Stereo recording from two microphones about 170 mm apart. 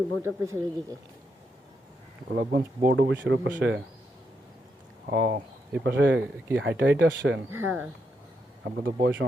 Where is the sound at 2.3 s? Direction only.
80° right.